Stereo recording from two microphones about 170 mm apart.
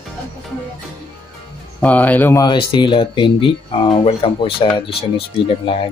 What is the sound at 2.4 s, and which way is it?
Speech, 25° left (ahead or behind).